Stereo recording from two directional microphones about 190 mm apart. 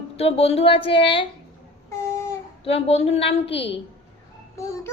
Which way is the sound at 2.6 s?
30° left (ahead or behind).